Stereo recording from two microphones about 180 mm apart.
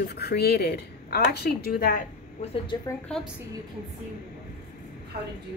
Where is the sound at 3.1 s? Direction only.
5° left (ahead or behind).